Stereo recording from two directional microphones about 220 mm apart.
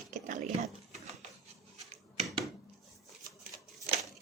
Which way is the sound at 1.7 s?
30° right (ahead or behind).